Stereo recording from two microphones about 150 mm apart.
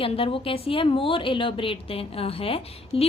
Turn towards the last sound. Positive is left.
turn(degrees=40)  # may be behind; listen again after turning